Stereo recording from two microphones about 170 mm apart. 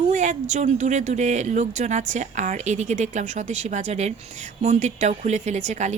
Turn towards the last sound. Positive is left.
turn(degrees=-45)  # may be behind; listen again after turning